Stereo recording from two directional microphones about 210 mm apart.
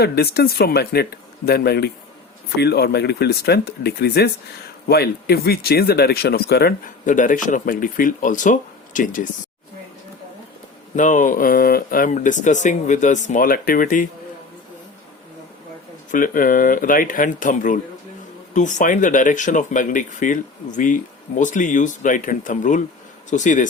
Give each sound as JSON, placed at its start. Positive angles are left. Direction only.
{"t": 0.0, "sound": "speech", "side_deg": 50}
{"t": 10.9, "sound": "speech", "side_deg": 35}
{"t": 16.1, "sound": "speech", "side_deg": 40}